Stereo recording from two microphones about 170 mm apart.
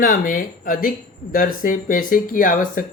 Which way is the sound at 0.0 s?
55° left (ahead or behind).